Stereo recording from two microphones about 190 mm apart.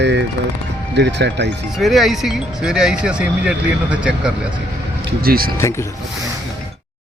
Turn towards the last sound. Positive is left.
turn(degrees=-50)  # may be behind; listen again after turning